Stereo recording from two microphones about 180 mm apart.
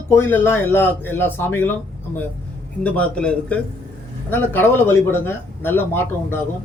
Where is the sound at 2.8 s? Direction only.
5° left (ahead or behind).